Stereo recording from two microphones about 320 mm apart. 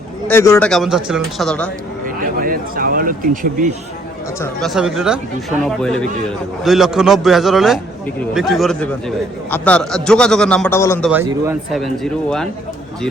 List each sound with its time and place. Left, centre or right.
0.3 s a man's voice: centre
2.0 s speech: right
4.4 s a man's voice: centre
11.1 s a man's voice: centre